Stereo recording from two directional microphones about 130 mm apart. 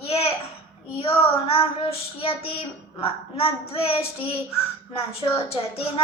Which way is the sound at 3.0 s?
50° left (ahead or behind).